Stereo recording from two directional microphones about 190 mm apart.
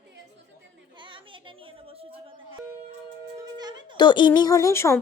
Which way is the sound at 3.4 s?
20° right (ahead or behind).